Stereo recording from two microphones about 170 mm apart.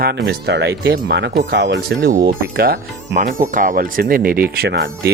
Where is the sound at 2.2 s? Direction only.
60° right (ahead or behind).